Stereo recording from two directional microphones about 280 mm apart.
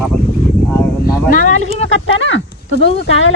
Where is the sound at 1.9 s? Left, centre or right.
Left.